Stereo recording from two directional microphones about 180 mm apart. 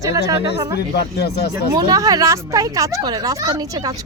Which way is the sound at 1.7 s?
20° right (ahead or behind).